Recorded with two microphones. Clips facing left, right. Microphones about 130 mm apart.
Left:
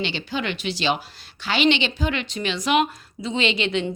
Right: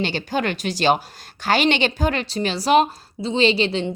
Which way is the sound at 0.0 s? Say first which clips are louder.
Right 4 dB; 45° right (ahead or behind).